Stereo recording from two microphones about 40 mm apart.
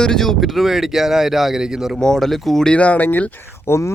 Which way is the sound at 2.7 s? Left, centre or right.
Left.